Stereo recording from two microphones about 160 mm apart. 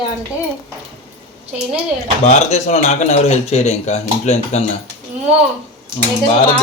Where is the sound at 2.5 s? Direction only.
45° left (ahead or behind).